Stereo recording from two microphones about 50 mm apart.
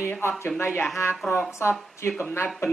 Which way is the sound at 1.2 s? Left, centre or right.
Centre.